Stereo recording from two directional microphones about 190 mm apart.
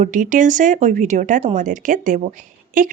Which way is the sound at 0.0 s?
45° right (ahead or behind).